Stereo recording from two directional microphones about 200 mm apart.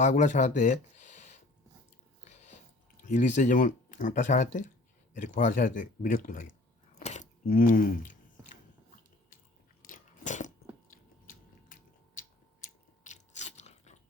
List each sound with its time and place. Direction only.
0.0 s speech: 40° left (ahead or behind)
2.2 s biting: 35° left (ahead or behind)
3.0 s speech: 40° left (ahead or behind)
9.8 s biting: 40° left (ahead or behind)
13.1 s biting: 35° left (ahead or behind)